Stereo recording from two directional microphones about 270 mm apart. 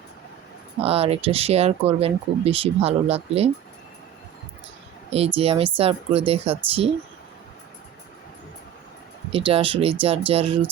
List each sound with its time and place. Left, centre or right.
0.8 s speech: right
5.1 s speech: right
9.3 s speech: centre